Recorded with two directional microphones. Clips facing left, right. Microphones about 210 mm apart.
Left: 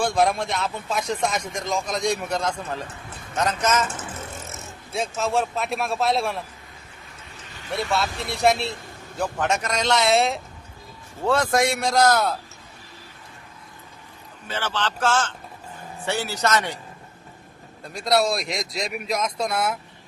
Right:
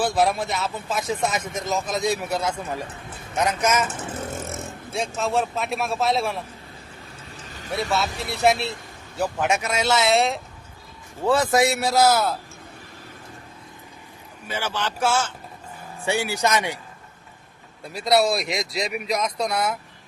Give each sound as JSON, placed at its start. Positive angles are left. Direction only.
{"t": 0.0, "sound": "a man's voice", "side_deg": -5}
{"t": 4.4, "sound": "vehicle", "side_deg": -55}
{"t": 4.9, "sound": "a man's voice", "side_deg": 0}
{"t": 7.7, "sound": "a man's voice", "side_deg": 0}
{"t": 14.4, "sound": "a man's voice", "side_deg": -10}
{"t": 17.8, "sound": "a man's voice", "side_deg": -5}